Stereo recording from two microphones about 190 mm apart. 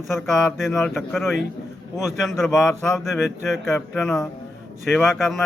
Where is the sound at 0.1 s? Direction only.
Centre (ahead or behind).